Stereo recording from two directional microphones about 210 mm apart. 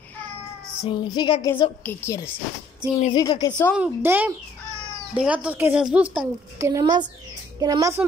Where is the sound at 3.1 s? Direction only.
20° left (ahead or behind).